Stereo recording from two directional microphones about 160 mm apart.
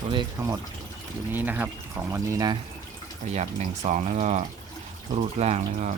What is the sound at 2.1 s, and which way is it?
Speech, 25° right (ahead or behind).